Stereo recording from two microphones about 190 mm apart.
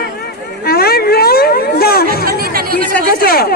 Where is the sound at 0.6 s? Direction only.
55° left (ahead or behind).